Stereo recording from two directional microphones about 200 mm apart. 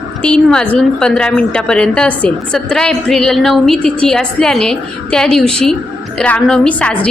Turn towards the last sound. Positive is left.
turn(degrees=5)  # may be behind; listen again after turning